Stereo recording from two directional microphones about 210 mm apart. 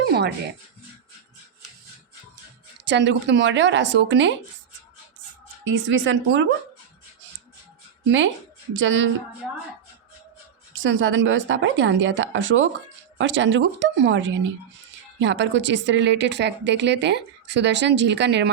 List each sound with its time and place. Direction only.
0.0 s dog: 50° right (ahead or behind)
2.8 s a woman's voice: 55° right (ahead or behind)
5.6 s a woman's voice: 60° right (ahead or behind)
8.8 s a woman's voice: 65° right (ahead or behind)
10.8 s a woman's voice: 65° right (ahead or behind)